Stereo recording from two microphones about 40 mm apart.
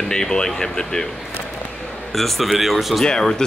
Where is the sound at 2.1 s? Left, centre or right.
Centre.